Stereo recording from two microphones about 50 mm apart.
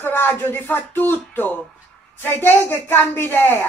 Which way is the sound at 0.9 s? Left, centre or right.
Left.